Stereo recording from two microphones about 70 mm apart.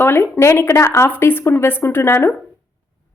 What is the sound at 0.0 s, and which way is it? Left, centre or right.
A woman's voice, left.